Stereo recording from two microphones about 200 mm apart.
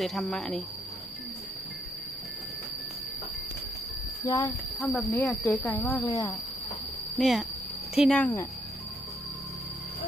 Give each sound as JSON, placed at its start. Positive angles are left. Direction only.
{"t": 0.0, "sound": "speech", "side_deg": 0}
{"t": 4.5, "sound": "speech", "side_deg": 0}
{"t": 7.2, "sound": "speech", "side_deg": 0}